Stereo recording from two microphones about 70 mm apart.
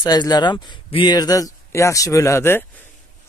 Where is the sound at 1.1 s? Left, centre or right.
Left.